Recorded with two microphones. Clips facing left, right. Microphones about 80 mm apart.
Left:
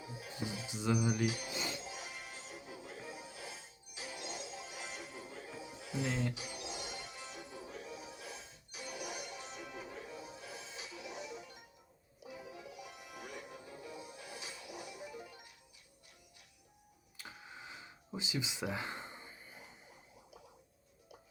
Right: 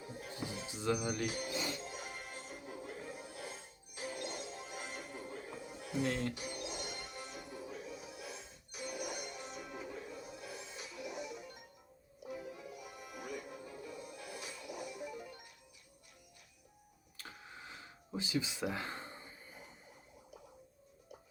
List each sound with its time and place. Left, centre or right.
0.0 s music: right
0.7 s speech: centre
0.9 s speech: centre
1.3 s speech: right
1.7 s music: right
17.2 s cash register: centre
18.7 s a sound: centre